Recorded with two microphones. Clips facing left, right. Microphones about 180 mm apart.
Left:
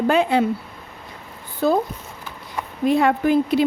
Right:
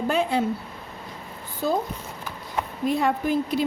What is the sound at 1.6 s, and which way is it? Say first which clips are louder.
Speech: left 6 dB; 65° left (ahead or behind).